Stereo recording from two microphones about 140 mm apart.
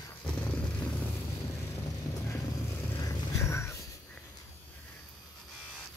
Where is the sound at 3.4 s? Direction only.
20° left (ahead or behind).